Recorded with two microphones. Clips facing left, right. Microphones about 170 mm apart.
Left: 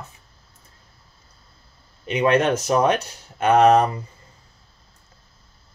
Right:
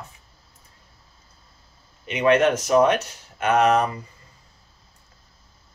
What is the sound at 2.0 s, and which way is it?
Speech, 35° left (ahead or behind).